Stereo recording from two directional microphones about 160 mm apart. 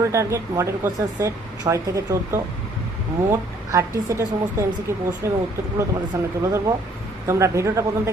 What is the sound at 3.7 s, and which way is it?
Speech, 20° right (ahead or behind).